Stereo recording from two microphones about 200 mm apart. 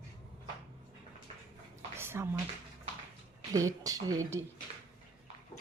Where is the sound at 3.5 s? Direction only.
15° right (ahead or behind).